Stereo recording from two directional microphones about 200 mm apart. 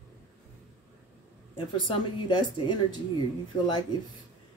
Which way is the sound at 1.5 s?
25° left (ahead or behind).